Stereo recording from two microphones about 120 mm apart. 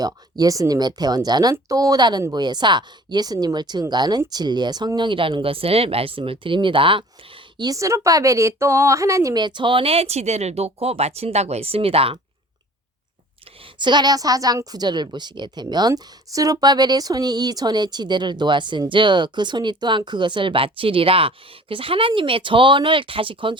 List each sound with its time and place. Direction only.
0.0 s speech: 30° right (ahead or behind); by 7.0 s 45° right (ahead or behind)
7.6 s a woman's voice: 30° right (ahead or behind)
9.4 s speech: 40° right (ahead or behind)
13.7 s speech: 40° right (ahead or behind)